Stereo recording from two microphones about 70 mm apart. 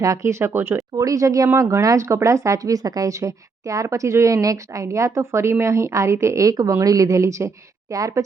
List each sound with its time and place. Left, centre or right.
0.0 s speech: right
0.9 s a woman's voice: right